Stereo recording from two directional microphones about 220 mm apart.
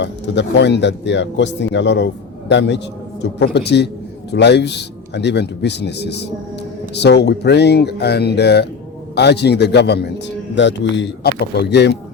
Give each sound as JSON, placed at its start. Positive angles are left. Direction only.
{"t": 0.0, "sound": "speech", "side_deg": 50}